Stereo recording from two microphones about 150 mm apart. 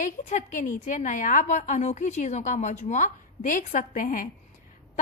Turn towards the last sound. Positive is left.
turn(degrees=65)  # may be behind; listen again after turning